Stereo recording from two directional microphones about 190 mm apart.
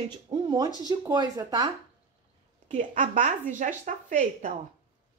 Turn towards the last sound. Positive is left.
turn(degrees=-40)  # may be behind; listen again after turning